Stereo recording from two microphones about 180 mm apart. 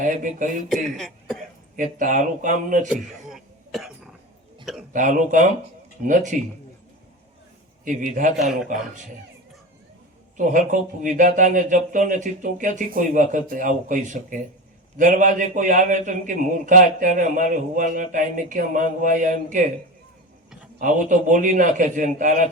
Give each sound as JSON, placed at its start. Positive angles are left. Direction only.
{"t": 0.0, "sound": "a man's voice", "side_deg": -45}
{"t": 0.7, "sound": "cough", "side_deg": 0}
{"t": 1.7, "sound": "a man's voice", "side_deg": -45}
{"t": 3.2, "sound": "cough", "side_deg": 0}
{"t": 4.6, "sound": "a sound", "side_deg": 0}
{"t": 4.9, "sound": "a man's voice", "side_deg": -45}
{"t": 7.9, "sound": "a man's voice", "side_deg": -45}
{"t": 10.3, "sound": "a man's voice", "side_deg": -45}
{"t": 20.7, "sound": "a man's voice", "side_deg": -45}